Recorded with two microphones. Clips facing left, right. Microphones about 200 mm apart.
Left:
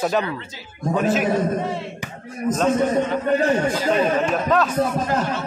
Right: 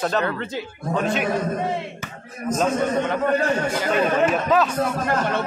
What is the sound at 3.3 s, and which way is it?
Speech, 15° left (ahead or behind).